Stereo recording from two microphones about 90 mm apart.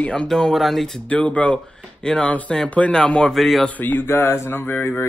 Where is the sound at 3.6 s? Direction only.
20° left (ahead or behind).